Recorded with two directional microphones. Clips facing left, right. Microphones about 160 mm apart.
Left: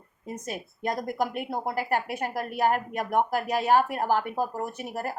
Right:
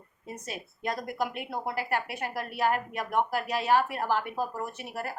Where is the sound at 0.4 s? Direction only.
45° left (ahead or behind).